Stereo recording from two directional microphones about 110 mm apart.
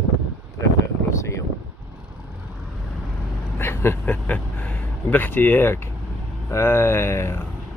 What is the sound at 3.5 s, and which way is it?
Speech, 20° left (ahead or behind).